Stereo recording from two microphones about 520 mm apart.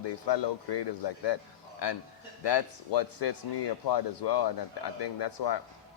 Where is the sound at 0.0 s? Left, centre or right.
Left.